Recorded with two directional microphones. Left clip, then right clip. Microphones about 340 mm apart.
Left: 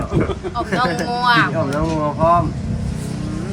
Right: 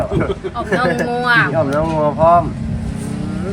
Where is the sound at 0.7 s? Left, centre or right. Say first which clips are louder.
Right 3 dB; centre.